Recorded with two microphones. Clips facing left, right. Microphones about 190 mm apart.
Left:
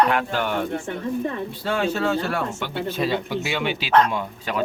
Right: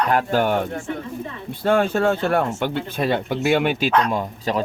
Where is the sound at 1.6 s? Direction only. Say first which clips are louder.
Right 6 dB; 50° right (ahead or behind).